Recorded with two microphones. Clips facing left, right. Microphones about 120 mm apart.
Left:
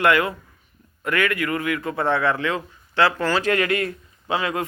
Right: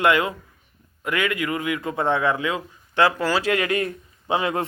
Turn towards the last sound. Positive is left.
turn(degrees=-20)  # may be behind; listen again after turning